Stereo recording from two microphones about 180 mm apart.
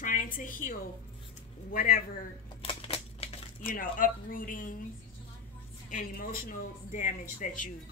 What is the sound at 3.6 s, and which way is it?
Speech, 50° left (ahead or behind).